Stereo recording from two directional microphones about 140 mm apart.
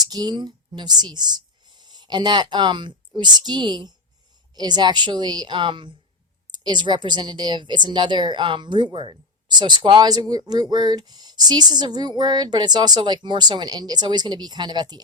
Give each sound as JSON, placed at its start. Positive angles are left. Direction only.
{"t": 0.0, "sound": "speech", "side_deg": -30}